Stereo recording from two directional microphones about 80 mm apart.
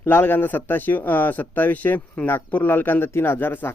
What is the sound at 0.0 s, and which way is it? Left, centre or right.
Speech, left.